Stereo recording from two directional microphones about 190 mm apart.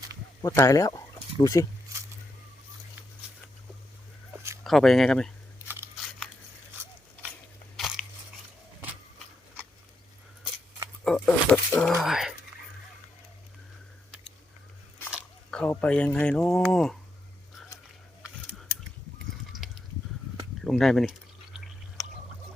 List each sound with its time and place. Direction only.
0.4 s speech: 15° left (ahead or behind)
1.9 s a sound: 15° right (ahead or behind)
4.6 s speech: centre (ahead or behind)
5.6 s scissors: 10° right (ahead or behind)
7.8 s crunch: centre (ahead or behind)
8.8 s vehicle: 10° right (ahead or behind)
11.0 s speech: 5° left (ahead or behind)
15.1 s speech: 5° left (ahead or behind)
20.6 s drip: centre (ahead or behind)